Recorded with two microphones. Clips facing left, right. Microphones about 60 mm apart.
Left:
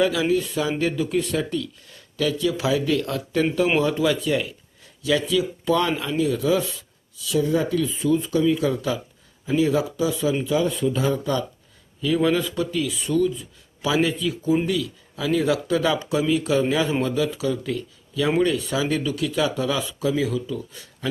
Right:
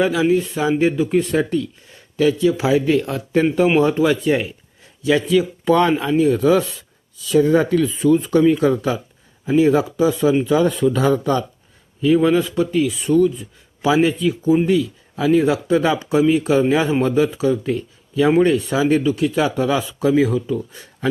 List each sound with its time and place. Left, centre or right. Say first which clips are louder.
0.0 s speech: right 4 dB; right
8.5 s speech: right 6 dB; right
10.4 s speech: right 6 dB; right
11.2 s speech: right 5 dB; right
12.0 s speech: right 6 dB; right